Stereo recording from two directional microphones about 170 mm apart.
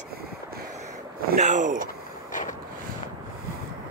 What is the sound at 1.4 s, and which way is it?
Speech, 45° right (ahead or behind).